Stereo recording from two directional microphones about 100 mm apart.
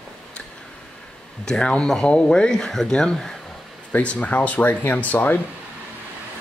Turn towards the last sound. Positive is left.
turn(degrees=15)  # may be behind; listen again after turning